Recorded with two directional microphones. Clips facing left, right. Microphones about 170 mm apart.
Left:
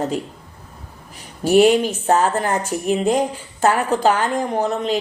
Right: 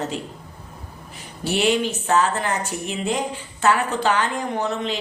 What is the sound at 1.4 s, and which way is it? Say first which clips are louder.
A woman's voice: left 7 dB; 45° left (ahead or behind).